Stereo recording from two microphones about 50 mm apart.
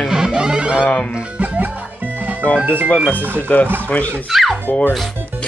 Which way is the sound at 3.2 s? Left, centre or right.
Right.